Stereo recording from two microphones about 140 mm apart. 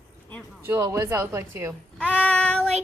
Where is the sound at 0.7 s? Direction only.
20° right (ahead or behind).